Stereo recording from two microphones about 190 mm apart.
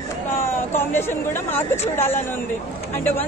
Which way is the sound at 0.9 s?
10° left (ahead or behind).